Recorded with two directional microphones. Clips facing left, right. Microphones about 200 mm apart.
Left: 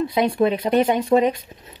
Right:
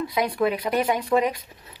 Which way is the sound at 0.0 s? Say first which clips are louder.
Left 4 dB; 25° left (ahead or behind).